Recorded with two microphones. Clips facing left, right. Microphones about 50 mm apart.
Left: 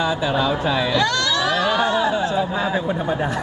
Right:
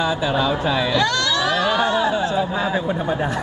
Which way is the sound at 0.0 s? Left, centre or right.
Centre.